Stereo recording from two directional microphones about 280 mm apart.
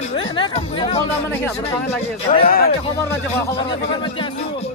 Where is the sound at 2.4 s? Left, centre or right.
Left.